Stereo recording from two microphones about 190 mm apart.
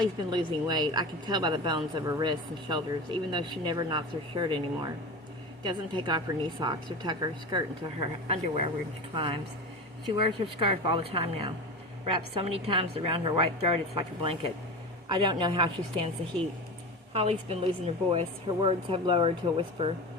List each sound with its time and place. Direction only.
0.0 s a woman's voice: 20° right (ahead or behind)
17.2 s a woman's voice: 35° right (ahead or behind)